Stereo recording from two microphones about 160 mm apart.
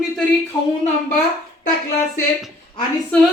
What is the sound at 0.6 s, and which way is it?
Speech, 25° left (ahead or behind).